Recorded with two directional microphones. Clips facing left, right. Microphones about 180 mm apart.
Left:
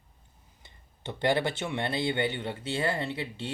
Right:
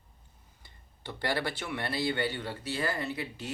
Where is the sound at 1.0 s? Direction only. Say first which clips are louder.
Left 5 dB; 20° left (ahead or behind).